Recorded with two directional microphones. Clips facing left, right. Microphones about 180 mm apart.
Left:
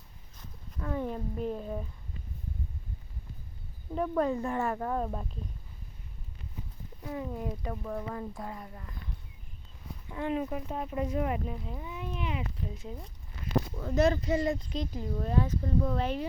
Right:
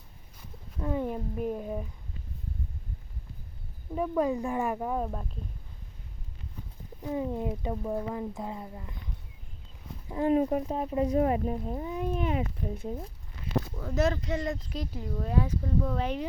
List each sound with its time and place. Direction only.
0.8 s a sound: 15° right (ahead or behind)
3.9 s speech: 5° right (ahead or behind)
7.0 s speech: 20° right (ahead or behind)
10.1 s speech: 35° right (ahead or behind); by 13.0 s 50° right (ahead or behind)
13.9 s speech: centre (ahead or behind)